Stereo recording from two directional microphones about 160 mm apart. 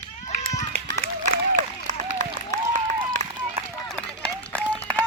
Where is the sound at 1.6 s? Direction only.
50° right (ahead or behind).